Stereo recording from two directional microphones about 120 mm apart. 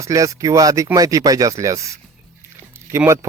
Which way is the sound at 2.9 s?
25° right (ahead or behind).